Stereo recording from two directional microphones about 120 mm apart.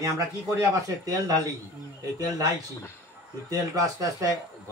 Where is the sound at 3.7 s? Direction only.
25° right (ahead or behind).